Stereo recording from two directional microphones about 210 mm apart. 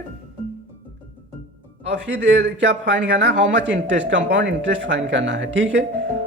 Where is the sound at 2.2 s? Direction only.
60° right (ahead or behind).